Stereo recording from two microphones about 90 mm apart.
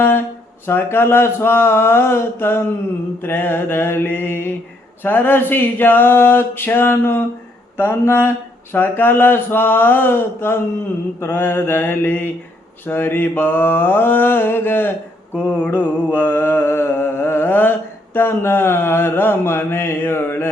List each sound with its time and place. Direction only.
0.6 s mantra: 25° left (ahead or behind)